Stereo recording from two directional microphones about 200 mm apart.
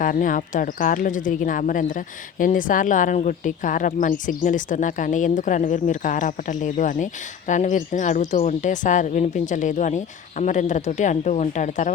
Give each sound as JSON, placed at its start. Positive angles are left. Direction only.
{"t": 0.0, "sound": "speech", "side_deg": 40}